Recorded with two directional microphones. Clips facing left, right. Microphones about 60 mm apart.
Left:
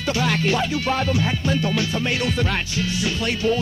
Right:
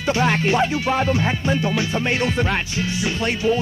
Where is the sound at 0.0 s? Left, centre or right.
Right.